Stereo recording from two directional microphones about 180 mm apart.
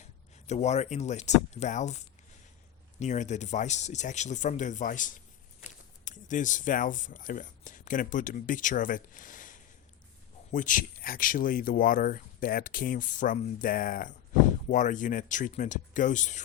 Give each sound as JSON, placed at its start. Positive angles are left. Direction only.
{"t": 0.4, "sound": "speech", "side_deg": 40}